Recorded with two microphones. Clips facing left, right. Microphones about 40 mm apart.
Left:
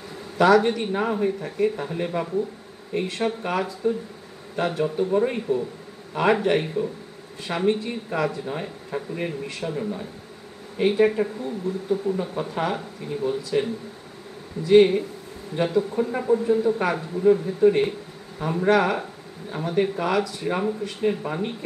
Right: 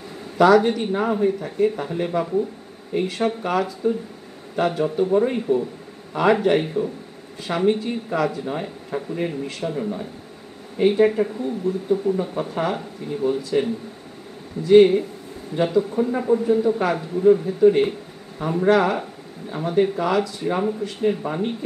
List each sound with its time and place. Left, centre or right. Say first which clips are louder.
0.4 s speech: right 2 dB; centre
3.3 s a man's voice: right 3 dB; centre
5.5 s a man's voice: right 5 dB; right
6.3 s a man's voice: right 3 dB; centre
14.7 s speech: right 3 dB; centre